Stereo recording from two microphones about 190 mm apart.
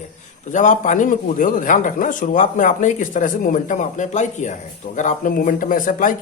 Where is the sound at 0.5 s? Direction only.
40° left (ahead or behind).